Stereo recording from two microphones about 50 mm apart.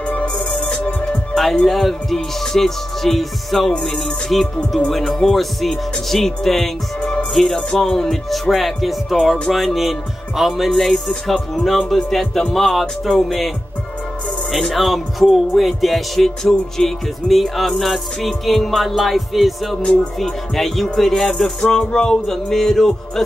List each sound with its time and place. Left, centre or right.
0.0 s music: left
1.3 s music: centre
14.5 s music: centre